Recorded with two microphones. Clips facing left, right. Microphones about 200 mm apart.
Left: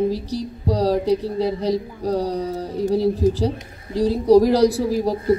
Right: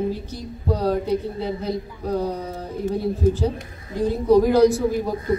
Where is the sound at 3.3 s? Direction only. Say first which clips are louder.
Left 1 dB; 35° left (ahead or behind).